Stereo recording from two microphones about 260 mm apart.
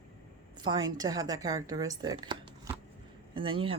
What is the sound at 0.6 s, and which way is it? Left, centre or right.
Speech, centre.